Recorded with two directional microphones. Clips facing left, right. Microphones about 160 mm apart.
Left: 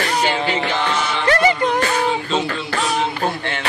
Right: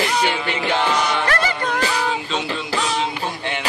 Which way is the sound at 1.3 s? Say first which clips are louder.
Left 6 dB; 20° left (ahead or behind).